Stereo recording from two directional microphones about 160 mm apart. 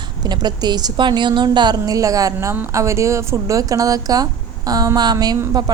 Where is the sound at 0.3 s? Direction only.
25° right (ahead or behind).